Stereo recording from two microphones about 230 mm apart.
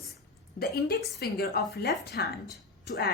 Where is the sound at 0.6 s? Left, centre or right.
Left.